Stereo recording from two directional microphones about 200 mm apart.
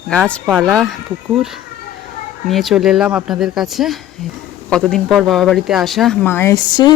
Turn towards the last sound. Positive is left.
turn(degrees=20)  # may be behind; listen again after turning